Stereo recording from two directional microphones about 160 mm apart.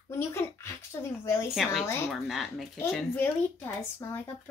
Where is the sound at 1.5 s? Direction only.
Centre (ahead or behind).